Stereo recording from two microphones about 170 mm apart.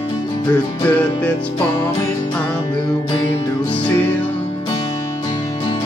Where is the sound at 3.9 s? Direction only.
10° left (ahead or behind).